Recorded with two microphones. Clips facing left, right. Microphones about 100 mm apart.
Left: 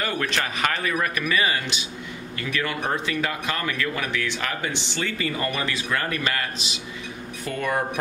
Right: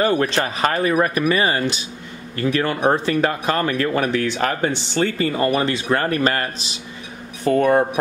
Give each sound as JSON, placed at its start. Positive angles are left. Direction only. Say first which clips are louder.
{"t": 0.0, "sound": "speech", "louder": "right 8 dB", "side_deg": -30}